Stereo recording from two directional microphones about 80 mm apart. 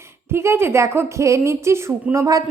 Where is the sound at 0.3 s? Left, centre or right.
Right.